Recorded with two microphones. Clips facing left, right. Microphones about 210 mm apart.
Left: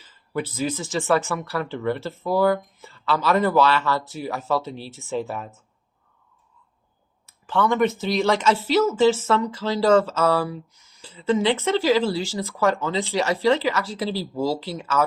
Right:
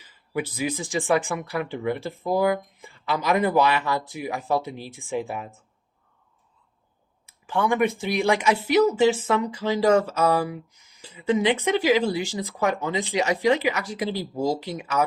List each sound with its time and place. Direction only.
0.0 s speech: 15° right (ahead or behind)
7.3 s speech: 10° right (ahead or behind)